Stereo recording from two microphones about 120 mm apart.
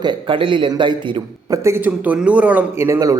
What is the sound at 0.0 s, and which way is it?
A man's voice, 40° right (ahead or behind).